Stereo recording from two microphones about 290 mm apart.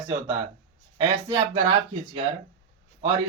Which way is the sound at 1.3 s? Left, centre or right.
Centre.